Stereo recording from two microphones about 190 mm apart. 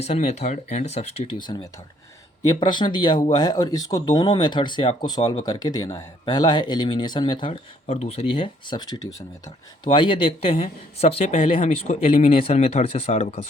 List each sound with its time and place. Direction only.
0.0 s speech: 35° left (ahead or behind)